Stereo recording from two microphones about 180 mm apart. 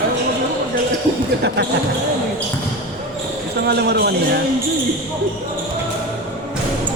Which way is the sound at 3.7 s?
65° right (ahead or behind).